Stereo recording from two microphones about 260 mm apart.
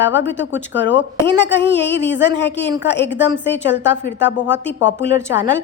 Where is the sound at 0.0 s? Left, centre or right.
Left.